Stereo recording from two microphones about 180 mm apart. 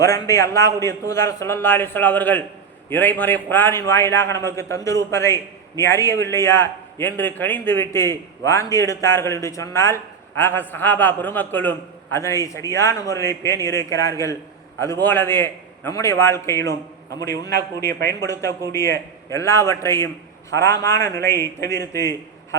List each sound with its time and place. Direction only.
0.0 s a man's voice: 15° left (ahead or behind)
17.7 s a man's voice: 15° left (ahead or behind)